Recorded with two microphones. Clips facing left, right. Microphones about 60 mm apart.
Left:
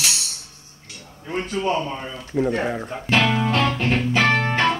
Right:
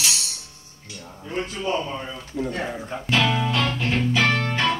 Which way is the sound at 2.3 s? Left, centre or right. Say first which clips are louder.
Left 6 dB; left.